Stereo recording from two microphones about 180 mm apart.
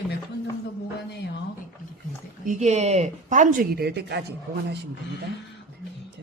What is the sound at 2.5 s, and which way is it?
Speech, 40° right (ahead or behind).